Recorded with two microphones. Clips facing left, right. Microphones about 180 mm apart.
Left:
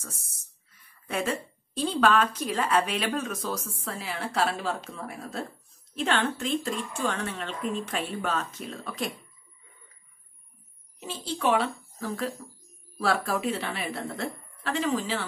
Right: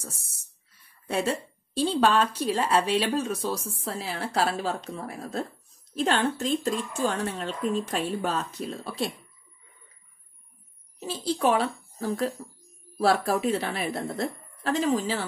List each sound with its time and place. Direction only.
0.0 s speech: 30° right (ahead or behind)
11.0 s speech: 35° right (ahead or behind)